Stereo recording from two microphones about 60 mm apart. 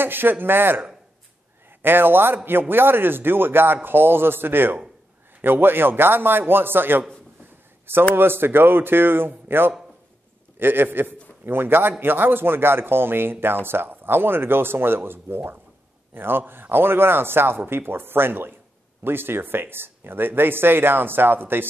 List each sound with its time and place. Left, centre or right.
0.0 s a man's voice: right